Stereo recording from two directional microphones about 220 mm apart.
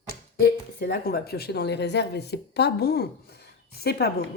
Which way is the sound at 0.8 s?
45° left (ahead or behind).